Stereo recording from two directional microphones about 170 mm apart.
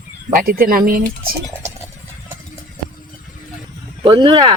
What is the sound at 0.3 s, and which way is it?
Speech, 60° right (ahead or behind).